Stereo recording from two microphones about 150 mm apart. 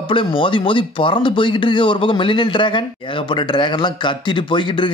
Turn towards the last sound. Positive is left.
turn(degrees=30)  # may be behind; listen again after turning